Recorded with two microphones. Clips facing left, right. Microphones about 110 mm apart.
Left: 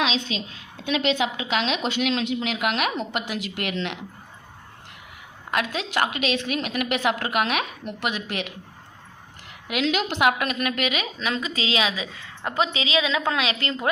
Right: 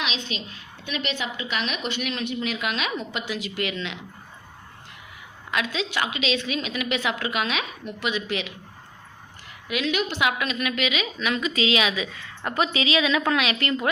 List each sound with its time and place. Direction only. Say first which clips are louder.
0.9 s a woman's voice: left 7 dB; 90° left; by 3.9 s 60° left (ahead or behind)
5.5 s a woman's voice: left 1 dB; 50° left (ahead or behind)
9.6 s a woman's voice: left 2 dB; 70° left (ahead or behind); by 11.3 s 45° left (ahead or behind)
11.3 s a woman's voice: right 3 dB; 30° left (ahead or behind)